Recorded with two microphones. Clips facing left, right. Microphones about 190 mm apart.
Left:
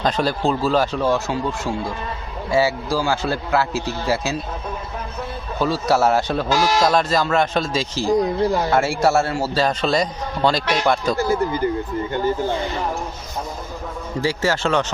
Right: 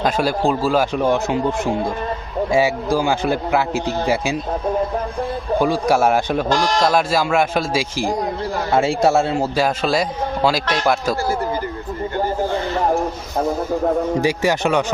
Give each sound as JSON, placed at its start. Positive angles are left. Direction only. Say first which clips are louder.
{"t": 0.0, "sound": "speech", "louder": "right 2 dB", "side_deg": -10}
{"t": 5.5, "sound": "speech", "louder": "right 2 dB", "side_deg": -15}
{"t": 6.5, "sound": "speech", "louder": "left 1 dB", "side_deg": 5}
{"t": 6.9, "sound": "speech", "louder": "right 1 dB", "side_deg": -10}
{"t": 9.6, "sound": "a man's voice", "louder": "right 1 dB", "side_deg": -5}
{"t": 11.2, "sound": "speech", "louder": "left 2 dB", "side_deg": 20}
{"t": 14.2, "sound": "speech", "louder": "right 3 dB", "side_deg": -15}